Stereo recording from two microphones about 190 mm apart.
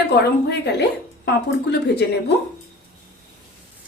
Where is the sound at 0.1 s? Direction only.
60° left (ahead or behind).